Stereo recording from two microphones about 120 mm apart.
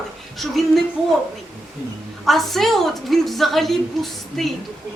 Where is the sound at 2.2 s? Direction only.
Centre (ahead or behind).